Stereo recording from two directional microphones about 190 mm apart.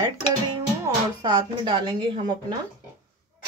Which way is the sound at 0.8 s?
20° right (ahead or behind).